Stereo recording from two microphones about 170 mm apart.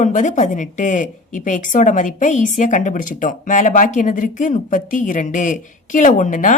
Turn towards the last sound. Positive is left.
turn(degrees=50)  # may be behind; listen again after turning